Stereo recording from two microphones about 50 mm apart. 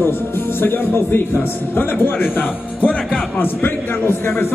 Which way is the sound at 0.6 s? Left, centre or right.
Left.